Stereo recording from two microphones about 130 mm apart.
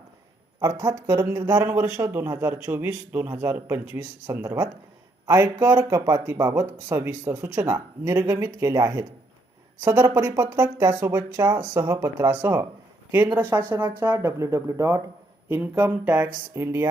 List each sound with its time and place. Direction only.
0.6 s speech: 30° right (ahead or behind)
10.2 s speech: 20° right (ahead or behind)